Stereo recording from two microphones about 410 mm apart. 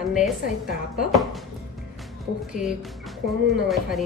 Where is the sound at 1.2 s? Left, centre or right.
Centre.